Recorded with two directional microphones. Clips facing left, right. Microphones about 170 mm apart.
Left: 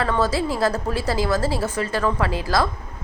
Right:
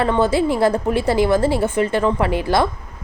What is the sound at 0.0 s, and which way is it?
Speech, 25° right (ahead or behind).